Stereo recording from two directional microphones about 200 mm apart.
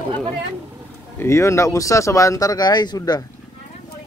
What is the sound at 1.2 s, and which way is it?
Speech, 15° left (ahead or behind).